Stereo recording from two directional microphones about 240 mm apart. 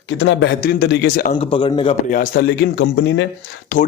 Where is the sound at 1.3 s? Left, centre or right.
Left.